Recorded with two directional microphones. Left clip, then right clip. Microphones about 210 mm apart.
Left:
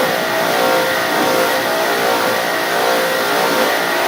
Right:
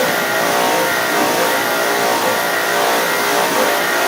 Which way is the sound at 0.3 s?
35° right (ahead or behind).